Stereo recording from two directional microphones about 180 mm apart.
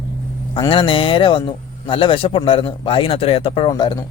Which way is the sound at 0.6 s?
30° left (ahead or behind).